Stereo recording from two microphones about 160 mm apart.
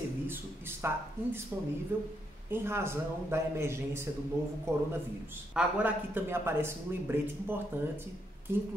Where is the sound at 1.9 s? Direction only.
15° right (ahead or behind).